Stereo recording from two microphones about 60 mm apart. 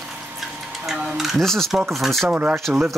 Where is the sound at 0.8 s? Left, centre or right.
Centre.